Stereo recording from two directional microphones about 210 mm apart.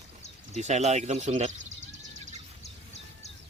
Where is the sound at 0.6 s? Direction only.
30° right (ahead or behind).